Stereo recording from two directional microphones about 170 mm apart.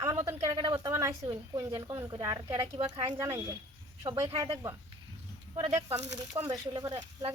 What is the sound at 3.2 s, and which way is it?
Speech, 15° right (ahead or behind).